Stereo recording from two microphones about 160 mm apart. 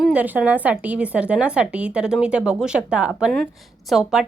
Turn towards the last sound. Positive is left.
turn(degrees=0)  # may be behind; listen again after turning